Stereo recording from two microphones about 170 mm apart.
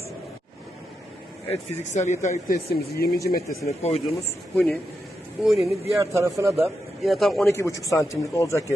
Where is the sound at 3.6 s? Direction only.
40° left (ahead or behind).